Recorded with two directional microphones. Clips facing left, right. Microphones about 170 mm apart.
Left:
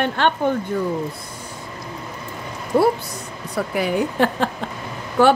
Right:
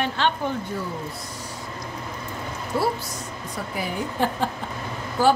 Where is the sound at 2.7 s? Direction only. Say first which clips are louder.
Left 8 dB; 50° left (ahead or behind).